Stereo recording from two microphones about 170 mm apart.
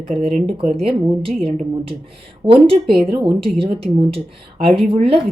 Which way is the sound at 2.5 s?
35° right (ahead or behind).